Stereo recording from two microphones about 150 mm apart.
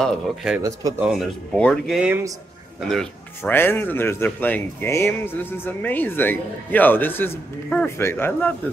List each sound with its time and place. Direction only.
0.0 s speech: 5° right (ahead or behind)
0.6 s speech: 25° right (ahead or behind)
0.9 s speech: 5° right (ahead or behind)
3.5 s a man's voice: 15° left (ahead or behind)